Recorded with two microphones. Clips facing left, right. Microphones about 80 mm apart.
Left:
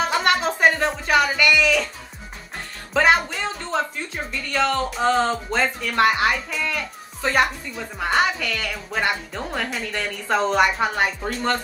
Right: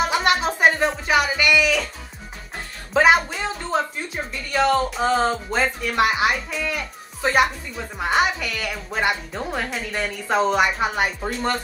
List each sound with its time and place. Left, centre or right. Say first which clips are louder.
0.1 s music: even; centre
1.0 s speech: left 3 dB; centre
2.9 s speech: right 2 dB; centre